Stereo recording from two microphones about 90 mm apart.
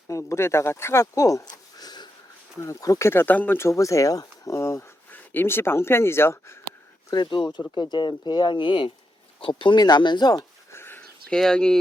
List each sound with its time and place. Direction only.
0.1 s speech: 35° left (ahead or behind)
2.6 s speech: 35° left (ahead or behind)
3.1 s speech: 25° left (ahead or behind)
7.1 s speech: 60° left (ahead or behind)
10.7 s a sound: 25° left (ahead or behind)
11.3 s speech: 10° left (ahead or behind)